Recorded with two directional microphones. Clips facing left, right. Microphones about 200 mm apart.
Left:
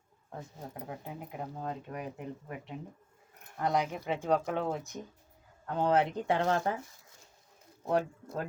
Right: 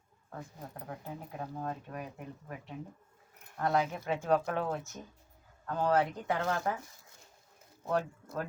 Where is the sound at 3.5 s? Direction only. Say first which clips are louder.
Even; 15° left (ahead or behind); by 6.7 s 30° left (ahead or behind).